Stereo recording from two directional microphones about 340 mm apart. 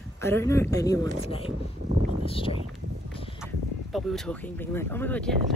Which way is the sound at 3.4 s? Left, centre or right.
Centre.